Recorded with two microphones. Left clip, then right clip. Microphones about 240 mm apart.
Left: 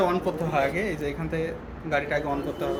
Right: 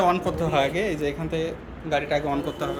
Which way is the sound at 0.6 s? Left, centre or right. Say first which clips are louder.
Right 2 dB; right.